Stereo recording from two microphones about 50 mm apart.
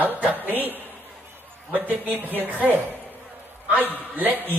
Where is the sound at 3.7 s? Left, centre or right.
Right.